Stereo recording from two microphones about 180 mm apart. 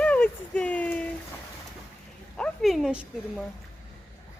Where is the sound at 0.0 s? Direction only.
10° left (ahead or behind).